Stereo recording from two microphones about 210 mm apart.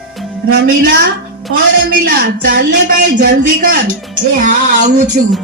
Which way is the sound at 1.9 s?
45° right (ahead or behind).